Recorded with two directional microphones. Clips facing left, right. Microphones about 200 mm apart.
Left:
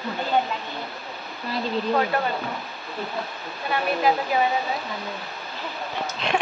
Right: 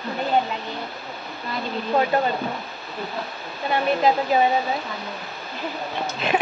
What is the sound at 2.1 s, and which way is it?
Speech, 20° right (ahead or behind).